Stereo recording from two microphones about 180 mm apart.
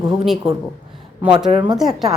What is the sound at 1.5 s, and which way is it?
Speech, 30° right (ahead or behind).